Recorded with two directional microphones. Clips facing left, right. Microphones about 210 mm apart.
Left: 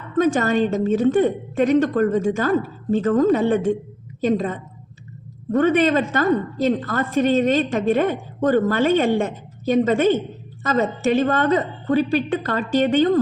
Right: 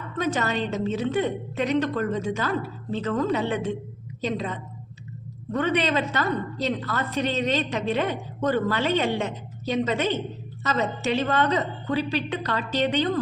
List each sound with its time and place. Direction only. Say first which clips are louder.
0.2 s a woman's voice: left 8 dB; 45° left (ahead or behind)